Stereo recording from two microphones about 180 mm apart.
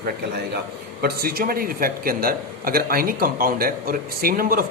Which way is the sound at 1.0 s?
60° right (ahead or behind).